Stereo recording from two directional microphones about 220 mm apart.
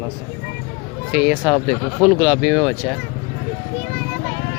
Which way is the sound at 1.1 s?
5° right (ahead or behind).